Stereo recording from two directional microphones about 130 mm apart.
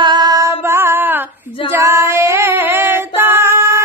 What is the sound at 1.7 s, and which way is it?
Female singing, 20° right (ahead or behind).